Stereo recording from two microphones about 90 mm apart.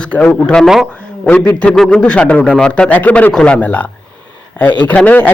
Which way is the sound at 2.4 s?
Centre (ahead or behind).